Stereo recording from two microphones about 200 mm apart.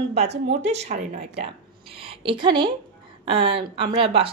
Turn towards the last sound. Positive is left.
turn(degrees=-30)  # may be behind; listen again after turning